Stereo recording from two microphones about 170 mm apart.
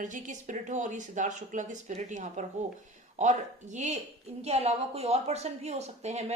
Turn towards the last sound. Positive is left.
turn(degrees=-40)  # may be behind; listen again after turning